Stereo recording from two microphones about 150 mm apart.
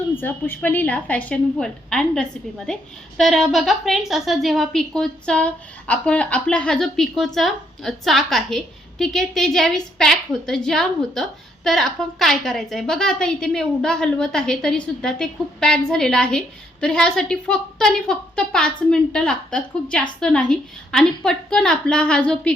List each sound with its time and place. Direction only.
0.2 s a woman's voice: 15° left (ahead or behind)